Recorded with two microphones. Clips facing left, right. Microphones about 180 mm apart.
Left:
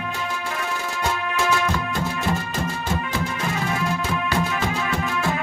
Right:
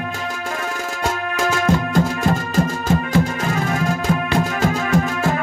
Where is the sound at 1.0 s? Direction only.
45° right (ahead or behind).